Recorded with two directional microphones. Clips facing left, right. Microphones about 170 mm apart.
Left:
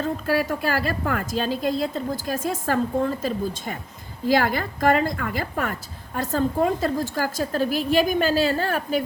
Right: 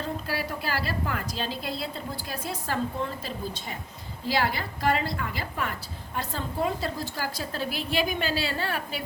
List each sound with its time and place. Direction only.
0.0 s a woman's voice: 50° left (ahead or behind)